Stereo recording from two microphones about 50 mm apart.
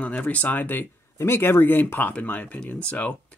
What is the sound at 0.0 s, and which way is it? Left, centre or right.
Speech, left.